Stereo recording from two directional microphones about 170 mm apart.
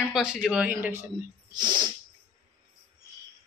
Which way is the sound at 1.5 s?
25° right (ahead or behind).